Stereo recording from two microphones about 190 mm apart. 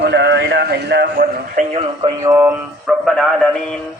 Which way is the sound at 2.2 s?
15° right (ahead or behind).